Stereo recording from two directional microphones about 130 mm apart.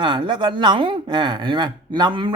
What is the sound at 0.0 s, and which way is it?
Speech, 35° right (ahead or behind).